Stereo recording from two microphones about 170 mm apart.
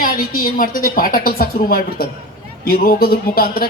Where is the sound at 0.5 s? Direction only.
55° left (ahead or behind).